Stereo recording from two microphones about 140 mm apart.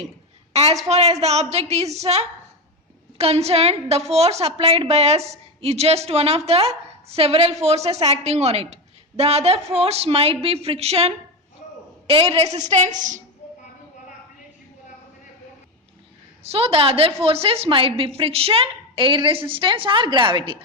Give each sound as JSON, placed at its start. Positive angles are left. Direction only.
{"t": 0.5, "sound": "a woman's voice", "side_deg": -50}
{"t": 16.4, "sound": "a woman's voice", "side_deg": -45}